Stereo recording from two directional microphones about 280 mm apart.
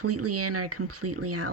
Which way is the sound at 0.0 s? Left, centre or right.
Right.